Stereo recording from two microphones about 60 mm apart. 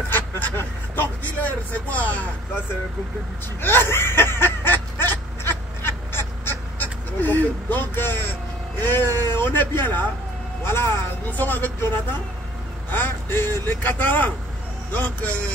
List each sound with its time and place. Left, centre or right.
0.6 s speech: left
3.6 s a sound: left
8.8 s speech: left
12.9 s speech: left